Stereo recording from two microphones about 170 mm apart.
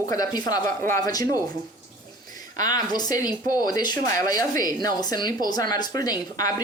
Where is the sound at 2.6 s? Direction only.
25° left (ahead or behind).